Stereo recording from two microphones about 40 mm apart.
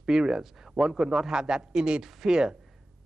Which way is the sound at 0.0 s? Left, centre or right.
Centre.